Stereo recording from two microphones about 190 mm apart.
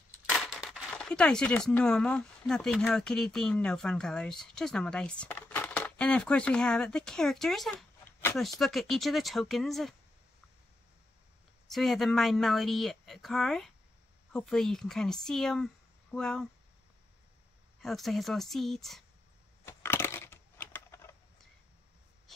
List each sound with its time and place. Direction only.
0.3 s speech: centre (ahead or behind)
11.6 s speech: centre (ahead or behind)
17.8 s speech: centre (ahead or behind)
19.6 s crushing: 10° left (ahead or behind)